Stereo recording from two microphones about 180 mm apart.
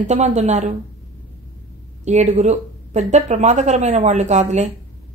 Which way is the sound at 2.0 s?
40° right (ahead or behind).